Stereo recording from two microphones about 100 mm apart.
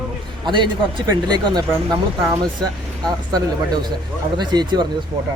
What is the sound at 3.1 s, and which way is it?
Speech, 40° right (ahead or behind).